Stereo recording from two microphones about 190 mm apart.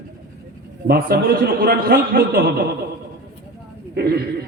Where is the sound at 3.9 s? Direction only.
55° right (ahead or behind).